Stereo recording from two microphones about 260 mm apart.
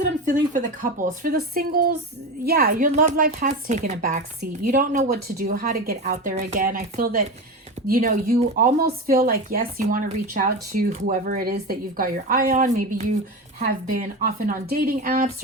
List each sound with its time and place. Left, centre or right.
0.3 s speech: right